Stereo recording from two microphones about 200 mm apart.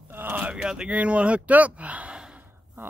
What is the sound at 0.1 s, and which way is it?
Speech, 10° right (ahead or behind).